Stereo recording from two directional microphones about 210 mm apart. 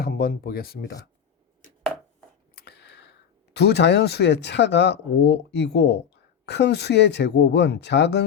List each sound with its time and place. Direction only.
0.0 s speech: 45° left (ahead or behind)
2.6 s speech: 50° left (ahead or behind)